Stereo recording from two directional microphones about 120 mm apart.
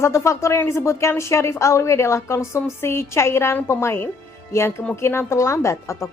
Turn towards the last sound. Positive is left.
turn(degrees=25)  # may be behind; listen again after turning